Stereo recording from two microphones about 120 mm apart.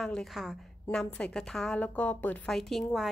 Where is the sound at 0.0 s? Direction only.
5° left (ahead or behind).